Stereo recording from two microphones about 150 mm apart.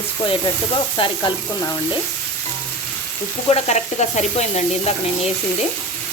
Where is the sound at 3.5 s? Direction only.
50° left (ahead or behind).